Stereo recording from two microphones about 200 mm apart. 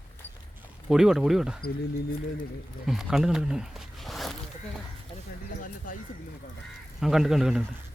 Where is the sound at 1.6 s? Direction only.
50° left (ahead or behind).